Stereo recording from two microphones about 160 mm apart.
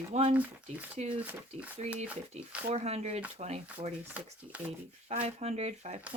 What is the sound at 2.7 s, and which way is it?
Speech, 40° right (ahead or behind).